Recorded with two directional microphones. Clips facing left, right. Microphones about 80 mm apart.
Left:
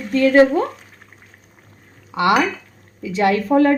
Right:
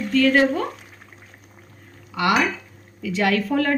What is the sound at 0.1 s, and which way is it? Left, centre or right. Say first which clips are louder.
Speech: left 5 dB; left.